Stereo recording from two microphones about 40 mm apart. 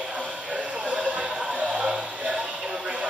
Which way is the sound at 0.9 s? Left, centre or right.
Right.